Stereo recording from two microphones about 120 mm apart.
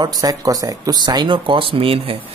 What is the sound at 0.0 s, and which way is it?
Speech, 30° right (ahead or behind).